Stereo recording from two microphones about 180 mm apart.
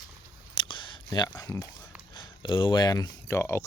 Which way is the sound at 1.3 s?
10° left (ahead or behind).